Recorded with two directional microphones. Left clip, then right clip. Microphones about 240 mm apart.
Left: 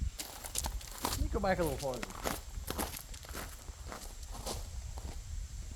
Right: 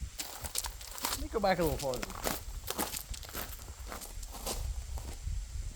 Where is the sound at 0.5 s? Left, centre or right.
Centre.